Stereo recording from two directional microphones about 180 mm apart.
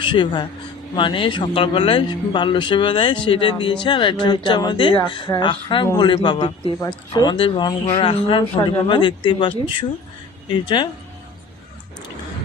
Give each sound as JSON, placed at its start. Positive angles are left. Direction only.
{"t": 0.0, "sound": "speech", "side_deg": 25}